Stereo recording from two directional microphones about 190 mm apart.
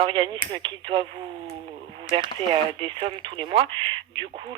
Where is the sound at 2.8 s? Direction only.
25° right (ahead or behind).